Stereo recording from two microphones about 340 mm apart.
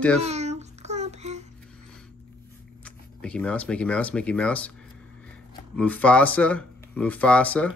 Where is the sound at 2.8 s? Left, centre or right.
Centre.